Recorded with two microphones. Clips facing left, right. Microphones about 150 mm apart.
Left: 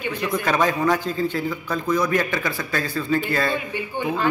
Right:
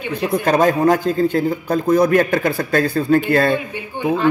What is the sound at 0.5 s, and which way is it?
A man's voice, 45° right (ahead or behind).